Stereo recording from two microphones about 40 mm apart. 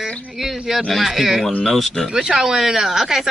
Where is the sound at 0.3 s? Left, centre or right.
Centre.